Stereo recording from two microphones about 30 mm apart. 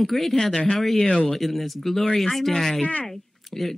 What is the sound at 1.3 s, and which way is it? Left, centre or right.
Speech, centre.